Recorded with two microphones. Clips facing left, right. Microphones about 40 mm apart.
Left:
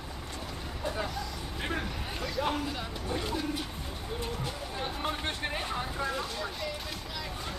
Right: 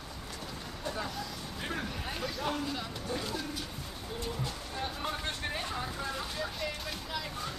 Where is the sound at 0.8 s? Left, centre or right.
Centre.